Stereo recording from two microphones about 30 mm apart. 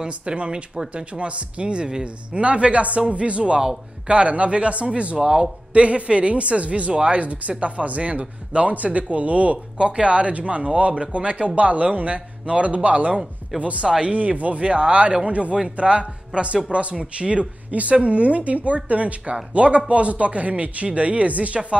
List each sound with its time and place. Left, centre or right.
0.0 s speech: right
0.9 s speech: right
5.2 s a man's voice: right
5.7 s speech: right
9.8 s a man's voice: right
17.0 s speech: right
17.6 s speech: right